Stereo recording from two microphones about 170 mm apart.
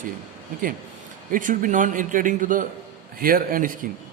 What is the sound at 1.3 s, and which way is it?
A man's voice, 50° right (ahead or behind).